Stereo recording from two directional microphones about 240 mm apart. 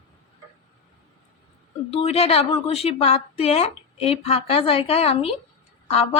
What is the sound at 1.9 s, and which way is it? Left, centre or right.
A woman's voice, left.